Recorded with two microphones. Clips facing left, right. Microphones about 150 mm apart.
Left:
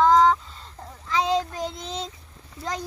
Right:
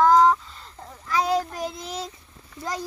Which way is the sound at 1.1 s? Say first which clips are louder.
Even; 20° left (ahead or behind).